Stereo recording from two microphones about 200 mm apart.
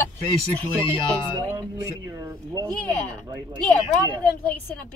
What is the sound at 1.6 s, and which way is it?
Speech, 15° right (ahead or behind).